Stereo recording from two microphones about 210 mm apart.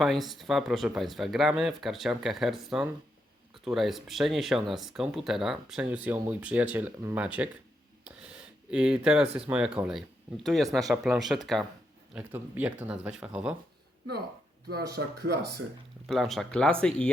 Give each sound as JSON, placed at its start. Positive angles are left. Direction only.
{"t": 0.0, "sound": "speech", "side_deg": 0}
{"t": 8.0, "sound": "a sound", "side_deg": -5}
{"t": 9.0, "sound": "speech", "side_deg": -5}
{"t": 14.9, "sound": "speech", "side_deg": -50}
{"t": 16.0, "sound": "speech", "side_deg": 0}